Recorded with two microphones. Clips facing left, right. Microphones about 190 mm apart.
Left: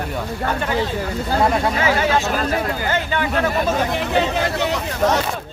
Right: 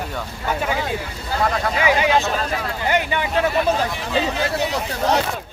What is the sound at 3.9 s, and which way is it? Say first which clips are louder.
Speech: left 3 dB; 65° left (ahead or behind).